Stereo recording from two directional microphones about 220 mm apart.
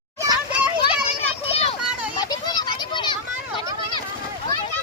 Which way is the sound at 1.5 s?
30° left (ahead or behind).